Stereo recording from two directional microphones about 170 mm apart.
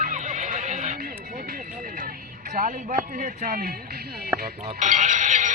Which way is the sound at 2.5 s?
50° right (ahead or behind).